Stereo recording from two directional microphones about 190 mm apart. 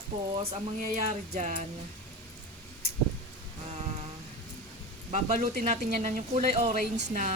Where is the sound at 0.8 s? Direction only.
40° right (ahead or behind).